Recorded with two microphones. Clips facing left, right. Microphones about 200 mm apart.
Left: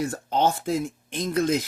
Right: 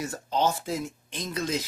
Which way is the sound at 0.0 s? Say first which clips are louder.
Left 3 dB; 55° left (ahead or behind).